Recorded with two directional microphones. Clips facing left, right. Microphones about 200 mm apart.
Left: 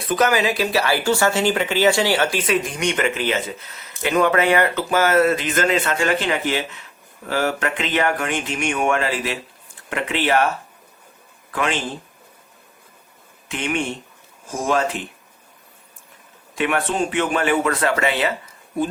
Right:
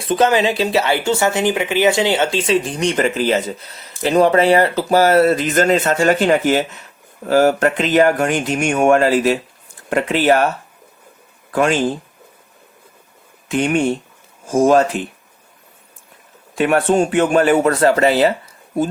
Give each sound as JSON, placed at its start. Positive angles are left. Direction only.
{"t": 0.0, "sound": "speech", "side_deg": -30}
{"t": 11.5, "sound": "speech", "side_deg": -40}
{"t": 13.5, "sound": "speech", "side_deg": -40}
{"t": 16.6, "sound": "speech", "side_deg": -40}